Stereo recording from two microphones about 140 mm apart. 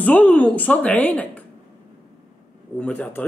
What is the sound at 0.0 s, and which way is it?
Speech, 10° left (ahead or behind).